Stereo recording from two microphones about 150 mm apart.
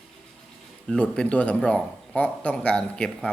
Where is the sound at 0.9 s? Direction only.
5° left (ahead or behind).